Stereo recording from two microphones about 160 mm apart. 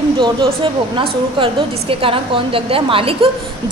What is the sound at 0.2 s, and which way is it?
A woman's voice, 30° right (ahead or behind).